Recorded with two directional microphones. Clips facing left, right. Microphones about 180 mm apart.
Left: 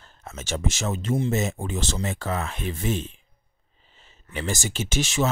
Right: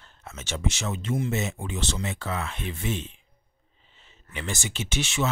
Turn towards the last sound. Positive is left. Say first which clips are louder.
# left 3 dB
turn(degrees=40)  # may be behind; listen again after turning